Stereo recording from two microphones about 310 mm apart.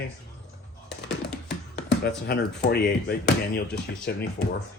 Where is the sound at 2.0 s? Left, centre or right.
Left.